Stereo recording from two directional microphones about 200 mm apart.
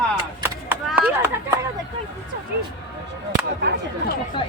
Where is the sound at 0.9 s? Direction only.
10° right (ahead or behind).